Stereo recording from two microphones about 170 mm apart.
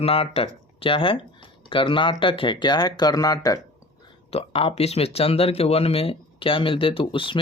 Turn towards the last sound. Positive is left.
turn(degrees=30)  # may be behind; listen again after turning